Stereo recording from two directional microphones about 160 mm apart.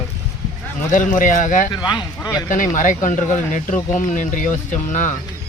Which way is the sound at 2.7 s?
55° left (ahead or behind).